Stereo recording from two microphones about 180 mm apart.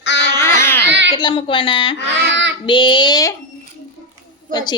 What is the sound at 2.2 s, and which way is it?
Speech, 80° right.